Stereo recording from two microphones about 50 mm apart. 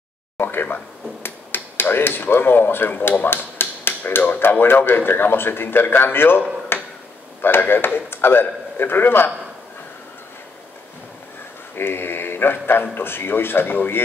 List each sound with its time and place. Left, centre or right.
0.4 s finger snapping: left
4.4 s a man's voice: left
6.7 s a sound: left
7.4 s a man's voice: left
11.7 s a man's voice: left